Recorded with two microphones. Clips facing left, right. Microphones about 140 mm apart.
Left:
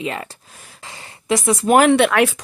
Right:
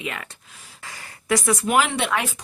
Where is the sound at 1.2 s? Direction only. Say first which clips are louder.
Left 3 dB; 25° left (ahead or behind).